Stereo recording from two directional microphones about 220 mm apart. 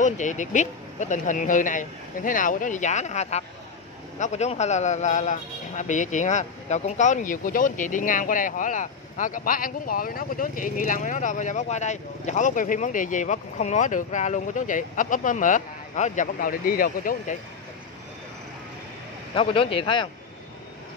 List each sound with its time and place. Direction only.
0.0 s a man's voice: 35° left (ahead or behind)
19.3 s speech: 25° left (ahead or behind)